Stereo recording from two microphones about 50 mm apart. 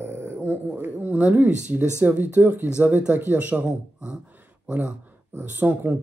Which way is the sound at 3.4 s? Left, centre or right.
Right.